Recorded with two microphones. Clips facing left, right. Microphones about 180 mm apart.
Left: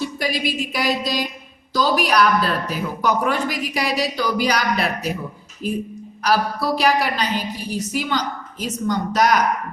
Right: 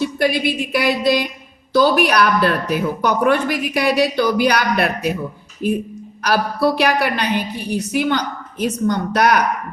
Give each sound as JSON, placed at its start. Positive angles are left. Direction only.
{"t": 0.0, "sound": "a sound", "side_deg": -60}
{"t": 1.7, "sound": "speech", "side_deg": -60}
{"t": 6.2, "sound": "speech", "side_deg": -65}